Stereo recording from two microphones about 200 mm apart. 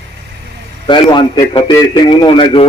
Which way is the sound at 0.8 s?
25° left (ahead or behind).